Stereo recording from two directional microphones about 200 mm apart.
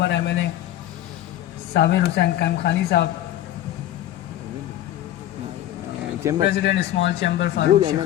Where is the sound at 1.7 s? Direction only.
60° left (ahead or behind).